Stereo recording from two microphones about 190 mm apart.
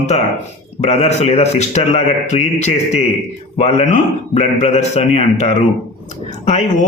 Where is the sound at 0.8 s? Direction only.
35° left (ahead or behind).